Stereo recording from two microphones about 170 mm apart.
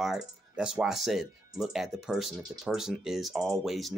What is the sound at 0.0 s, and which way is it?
Speech, 5° right (ahead or behind).